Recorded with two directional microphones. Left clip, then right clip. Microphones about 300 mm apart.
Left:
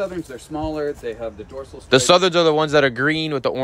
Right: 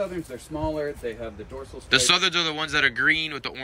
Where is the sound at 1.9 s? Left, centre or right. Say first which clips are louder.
Left 6 dB; centre.